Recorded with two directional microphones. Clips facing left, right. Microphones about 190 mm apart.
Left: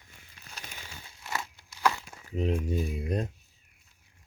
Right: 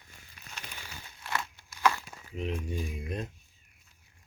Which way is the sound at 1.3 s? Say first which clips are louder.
Right 1 dB; 20° left (ahead or behind).